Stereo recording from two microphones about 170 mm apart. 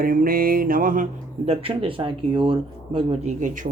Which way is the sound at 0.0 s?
55° right (ahead or behind).